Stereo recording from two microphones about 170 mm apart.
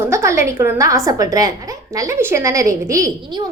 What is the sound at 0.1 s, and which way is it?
A woman's voice, 15° right (ahead or behind).